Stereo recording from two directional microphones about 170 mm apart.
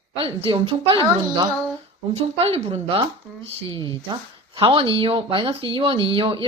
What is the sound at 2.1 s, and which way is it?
Speech, 35° right (ahead or behind).